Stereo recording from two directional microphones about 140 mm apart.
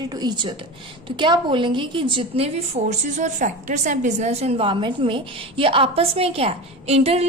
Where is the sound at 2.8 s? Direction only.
65° right (ahead or behind).